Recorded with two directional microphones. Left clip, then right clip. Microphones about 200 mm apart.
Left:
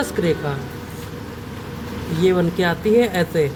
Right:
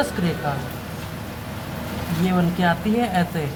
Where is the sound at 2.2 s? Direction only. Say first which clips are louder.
Left 4 dB; 20° left (ahead or behind).